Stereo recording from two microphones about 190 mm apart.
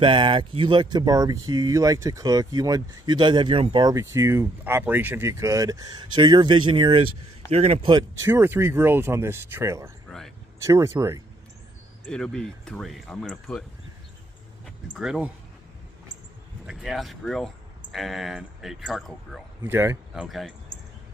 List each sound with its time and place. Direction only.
0.0 s speech: 25° right (ahead or behind)
8.3 s speech: 10° right (ahead or behind)
10.0 s a sound: centre (ahead or behind)
10.6 s speech: 15° right (ahead or behind)
12.1 s speech: 5° left (ahead or behind)
14.6 s a sound: 5° right (ahead or behind)
16.6 s speech: centre (ahead or behind)
19.6 s speech: 10° right (ahead or behind)
20.2 s speech: centre (ahead or behind)